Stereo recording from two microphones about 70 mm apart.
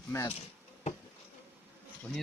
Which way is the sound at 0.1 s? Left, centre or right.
Left.